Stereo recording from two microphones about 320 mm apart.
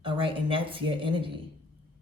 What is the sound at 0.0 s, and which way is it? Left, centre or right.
Speech, centre.